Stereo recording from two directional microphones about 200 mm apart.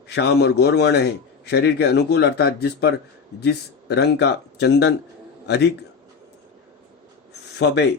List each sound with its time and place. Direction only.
0.2 s a man's voice: 55° left (ahead or behind)
7.6 s a man's voice: 55° left (ahead or behind)